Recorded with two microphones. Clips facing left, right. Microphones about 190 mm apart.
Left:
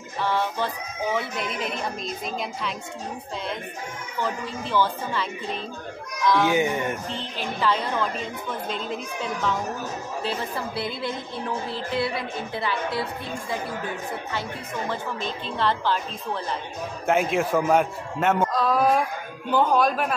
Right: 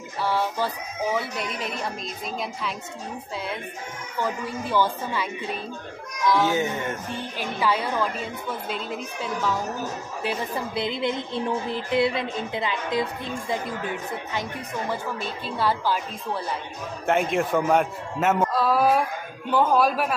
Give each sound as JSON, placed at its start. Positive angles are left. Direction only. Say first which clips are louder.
{"t": 0.2, "sound": "speech", "louder": "even", "side_deg": -10}
{"t": 4.2, "sound": "a woman's voice", "louder": "right 1 dB", "side_deg": -10}
{"t": 6.4, "sound": "speech", "louder": "left 2 dB", "side_deg": 15}
{"t": 7.1, "sound": "a woman's voice", "louder": "even", "side_deg": -10}
{"t": 10.2, "sound": "speech", "louder": "right 2 dB", "side_deg": -15}
{"t": 14.9, "sound": "a woman's voice", "louder": "left 1 dB", "side_deg": -10}
{"t": 17.0, "sound": "speech", "louder": "even", "side_deg": 0}